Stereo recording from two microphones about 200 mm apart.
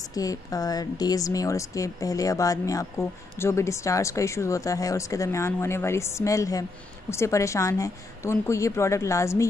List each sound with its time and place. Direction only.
0.1 s speech: 15° left (ahead or behind)